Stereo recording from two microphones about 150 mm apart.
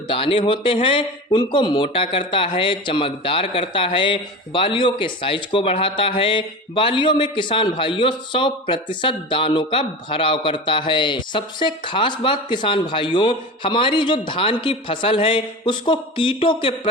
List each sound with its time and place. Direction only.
0.1 s a man's voice: 35° left (ahead or behind)